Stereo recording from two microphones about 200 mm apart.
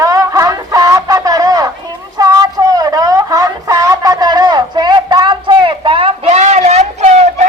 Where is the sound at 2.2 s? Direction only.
20° right (ahead or behind); by 7.5 s 35° right (ahead or behind).